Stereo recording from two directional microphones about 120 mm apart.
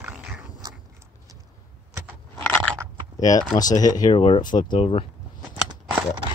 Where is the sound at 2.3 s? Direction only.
15° left (ahead or behind).